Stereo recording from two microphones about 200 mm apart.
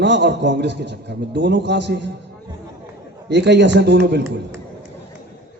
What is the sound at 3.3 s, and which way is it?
Speech, 60° right (ahead or behind).